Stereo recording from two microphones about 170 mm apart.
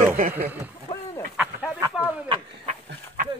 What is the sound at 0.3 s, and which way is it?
Speech, 10° right (ahead or behind).